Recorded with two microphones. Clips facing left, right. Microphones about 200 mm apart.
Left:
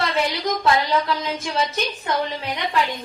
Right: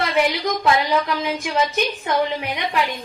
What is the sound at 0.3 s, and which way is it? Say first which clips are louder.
A woman's voice: right 1 dB; 15° right (ahead or behind).